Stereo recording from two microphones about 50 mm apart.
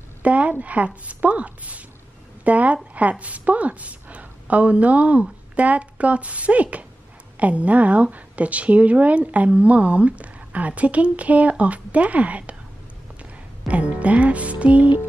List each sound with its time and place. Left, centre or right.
0.2 s a woman's voice: right
13.2 s music: right